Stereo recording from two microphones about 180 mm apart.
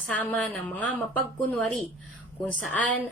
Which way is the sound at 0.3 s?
10° left (ahead or behind).